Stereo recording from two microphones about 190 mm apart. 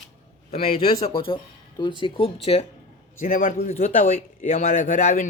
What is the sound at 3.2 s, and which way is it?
Speech, 45° left (ahead or behind).